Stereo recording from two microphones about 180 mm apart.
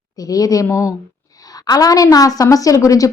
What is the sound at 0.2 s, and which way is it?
A woman's voice, 20° left (ahead or behind).